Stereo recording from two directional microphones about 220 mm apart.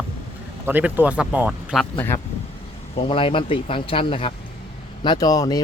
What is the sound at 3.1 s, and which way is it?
Speech, 25° left (ahead or behind).